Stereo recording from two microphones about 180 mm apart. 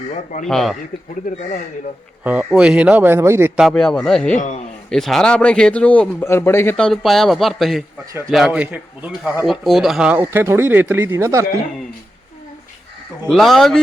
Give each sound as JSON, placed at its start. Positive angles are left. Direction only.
{"t": 0.4, "sound": "speech", "side_deg": 0}
{"t": 1.4, "sound": "speech", "side_deg": 40}
{"t": 2.2, "sound": "speech", "side_deg": -5}
{"t": 13.2, "sound": "speech", "side_deg": 0}